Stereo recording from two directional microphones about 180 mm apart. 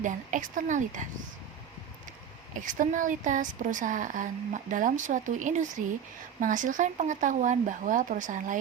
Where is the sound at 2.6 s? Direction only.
45° right (ahead or behind).